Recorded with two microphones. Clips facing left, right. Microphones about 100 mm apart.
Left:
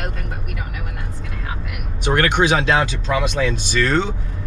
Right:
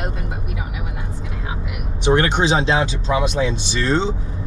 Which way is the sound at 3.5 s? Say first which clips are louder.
Left 1 dB; 50° left (ahead or behind).